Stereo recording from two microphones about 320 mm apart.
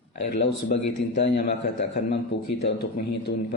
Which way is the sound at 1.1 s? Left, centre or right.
Left.